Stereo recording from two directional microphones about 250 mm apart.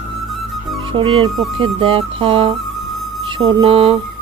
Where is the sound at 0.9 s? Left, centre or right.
Right.